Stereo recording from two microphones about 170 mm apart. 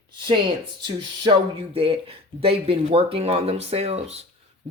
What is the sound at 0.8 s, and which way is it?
Speech, 30° right (ahead or behind).